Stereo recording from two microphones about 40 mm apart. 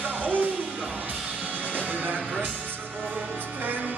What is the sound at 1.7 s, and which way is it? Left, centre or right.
Music, right.